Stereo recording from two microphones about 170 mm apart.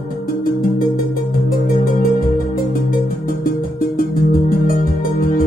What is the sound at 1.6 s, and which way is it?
Music, 55° left (ahead or behind).